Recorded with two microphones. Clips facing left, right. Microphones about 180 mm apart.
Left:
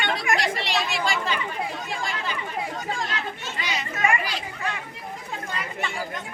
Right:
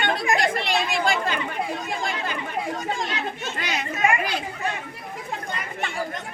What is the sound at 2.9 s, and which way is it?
Chatter, 20° right (ahead or behind).